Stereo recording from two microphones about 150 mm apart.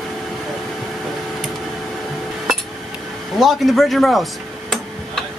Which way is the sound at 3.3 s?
Centre (ahead or behind).